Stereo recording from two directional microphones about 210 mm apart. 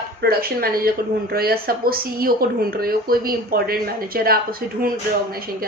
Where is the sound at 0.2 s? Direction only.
45° right (ahead or behind).